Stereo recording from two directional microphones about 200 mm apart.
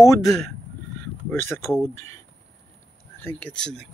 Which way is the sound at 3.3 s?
5° left (ahead or behind).